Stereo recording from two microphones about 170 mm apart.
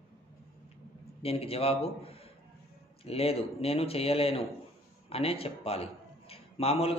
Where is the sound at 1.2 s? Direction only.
35° left (ahead or behind).